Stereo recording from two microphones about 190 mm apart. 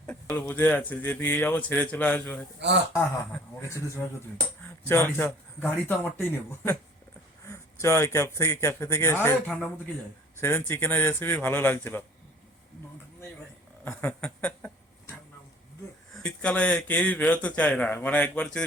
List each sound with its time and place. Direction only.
0.1 s speech: 10° left (ahead or behind)
3.7 s speech: 15° left (ahead or behind)
13.8 s a sound: 10° left (ahead or behind)
16.1 s speech: 5° left (ahead or behind)